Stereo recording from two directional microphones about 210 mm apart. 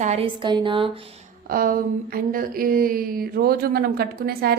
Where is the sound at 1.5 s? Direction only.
40° right (ahead or behind).